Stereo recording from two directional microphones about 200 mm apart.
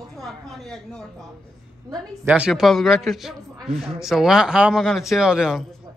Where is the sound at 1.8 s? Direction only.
10° right (ahead or behind).